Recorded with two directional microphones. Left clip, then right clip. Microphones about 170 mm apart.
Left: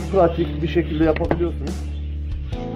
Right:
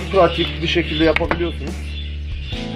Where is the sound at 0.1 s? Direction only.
10° right (ahead or behind).